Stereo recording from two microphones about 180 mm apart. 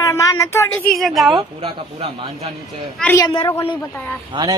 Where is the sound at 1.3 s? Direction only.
30° right (ahead or behind).